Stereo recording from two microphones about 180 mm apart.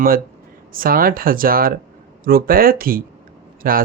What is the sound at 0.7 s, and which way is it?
Speech, 50° right (ahead or behind).